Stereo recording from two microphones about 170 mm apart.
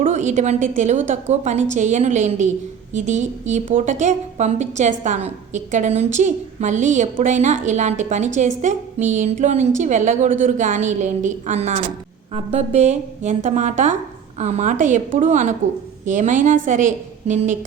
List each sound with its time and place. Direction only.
0.0 s a woman's voice: 45° right (ahead or behind)